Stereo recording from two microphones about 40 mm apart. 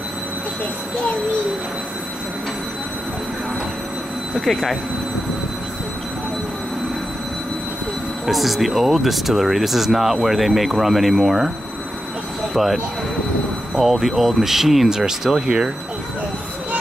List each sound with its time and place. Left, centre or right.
4.5 s speech: centre
8.3 s speech: centre
12.6 s speech: centre
13.7 s speech: centre; by 15.7 s right